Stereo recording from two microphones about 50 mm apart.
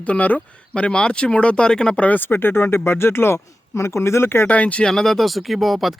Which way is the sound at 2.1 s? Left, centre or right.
Left.